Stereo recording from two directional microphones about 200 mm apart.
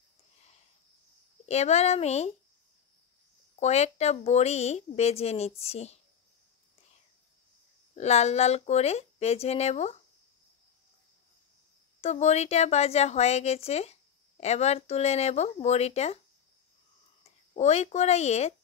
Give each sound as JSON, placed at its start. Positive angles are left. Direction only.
{"t": 1.4, "sound": "speech", "side_deg": 35}
{"t": 3.5, "sound": "speech", "side_deg": 35}
{"t": 7.9, "sound": "speech", "side_deg": 35}
{"t": 12.0, "sound": "speech", "side_deg": 35}
{"t": 17.2, "sound": "speech", "side_deg": 30}